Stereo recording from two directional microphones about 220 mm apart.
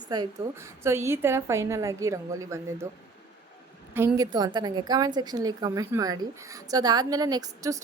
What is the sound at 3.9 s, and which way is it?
A woman's voice, 10° right (ahead or behind).